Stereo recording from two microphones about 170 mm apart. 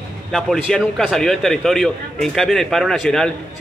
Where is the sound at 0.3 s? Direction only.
Centre (ahead or behind).